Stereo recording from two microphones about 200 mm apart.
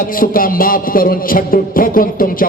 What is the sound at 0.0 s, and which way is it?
Music, 45° left (ahead or behind).